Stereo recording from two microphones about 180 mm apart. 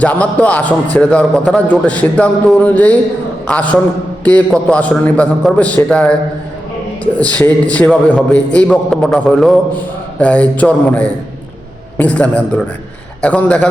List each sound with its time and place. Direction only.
0.0 s a man's voice: 10° left (ahead or behind)